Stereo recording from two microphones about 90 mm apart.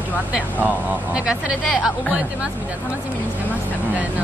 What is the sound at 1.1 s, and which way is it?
Speech, 10° right (ahead or behind).